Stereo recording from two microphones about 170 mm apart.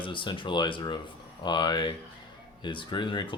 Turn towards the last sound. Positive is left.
turn(degrees=30)  # may be behind; listen again after turning